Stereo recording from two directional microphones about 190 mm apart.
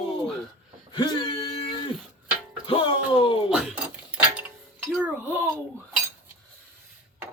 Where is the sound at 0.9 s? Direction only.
25° left (ahead or behind).